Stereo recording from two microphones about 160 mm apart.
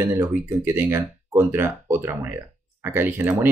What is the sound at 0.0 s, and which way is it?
Speech, 15° right (ahead or behind).